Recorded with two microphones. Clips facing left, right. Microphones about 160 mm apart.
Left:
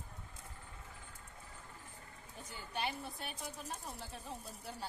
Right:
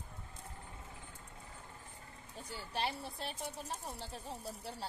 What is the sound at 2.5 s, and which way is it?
A woman's voice, 35° right (ahead or behind).